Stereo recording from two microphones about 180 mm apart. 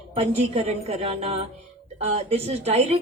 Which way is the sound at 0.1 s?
35° right (ahead or behind).